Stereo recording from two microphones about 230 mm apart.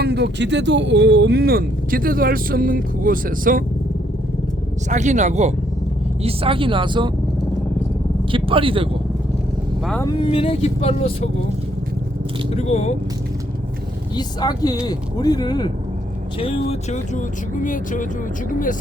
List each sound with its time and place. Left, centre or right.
0.0 s speech: right
4.9 s speech: right
8.3 s speech: right
9.8 s speech: centre
10.1 s speech: left
12.5 s speech: left
14.2 s speech: centre; by 18.0 s left